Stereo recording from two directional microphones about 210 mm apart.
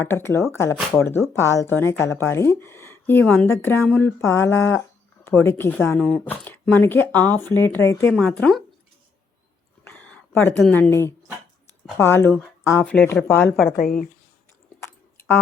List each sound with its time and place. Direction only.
0.0 s speech: 10° left (ahead or behind)
9.8 s a sound: 5° left (ahead or behind)
10.6 s speech: 10° left (ahead or behind)
13.7 s a woman's voice: 40° left (ahead or behind)
14.8 s chewing: 10° left (ahead or behind)